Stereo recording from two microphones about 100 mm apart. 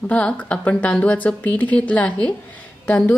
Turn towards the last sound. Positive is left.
turn(degrees=15)  # may be behind; listen again after turning